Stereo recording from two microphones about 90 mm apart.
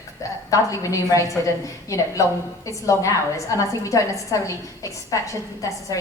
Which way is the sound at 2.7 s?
35° left (ahead or behind).